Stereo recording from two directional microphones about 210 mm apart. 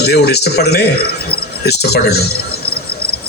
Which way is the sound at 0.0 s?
50° left (ahead or behind).